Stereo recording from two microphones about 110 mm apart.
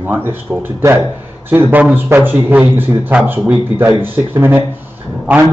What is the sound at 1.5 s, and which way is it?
A man's voice, 15° right (ahead or behind).